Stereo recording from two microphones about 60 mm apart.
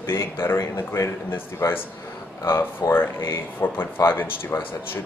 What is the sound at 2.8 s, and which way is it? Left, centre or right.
Speech, left.